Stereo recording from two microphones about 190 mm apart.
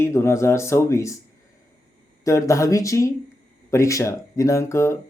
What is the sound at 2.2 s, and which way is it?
Speech, 15° left (ahead or behind).